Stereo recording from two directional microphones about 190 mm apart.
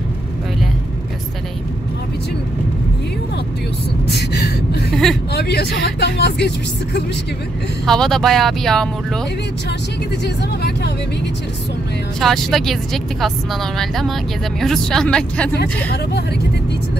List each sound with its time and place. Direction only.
4.1 s gasp: 60° left (ahead or behind)
5.3 s speech: 60° left (ahead or behind)
7.8 s speech: centre (ahead or behind)
10.2 s speech: 60° left (ahead or behind)
12.2 s speech: centre (ahead or behind)